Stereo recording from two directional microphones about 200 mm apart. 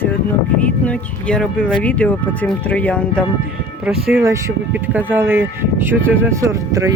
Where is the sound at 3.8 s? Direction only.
10° right (ahead or behind).